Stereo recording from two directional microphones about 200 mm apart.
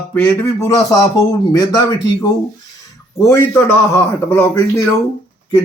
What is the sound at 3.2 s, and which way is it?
A man's voice, 15° left (ahead or behind).